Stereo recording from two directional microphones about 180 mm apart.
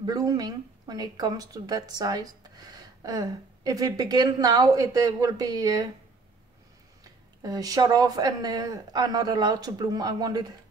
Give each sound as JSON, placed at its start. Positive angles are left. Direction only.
{"t": 0.0, "sound": "speech", "side_deg": -20}
{"t": 7.4, "sound": "speech", "side_deg": -20}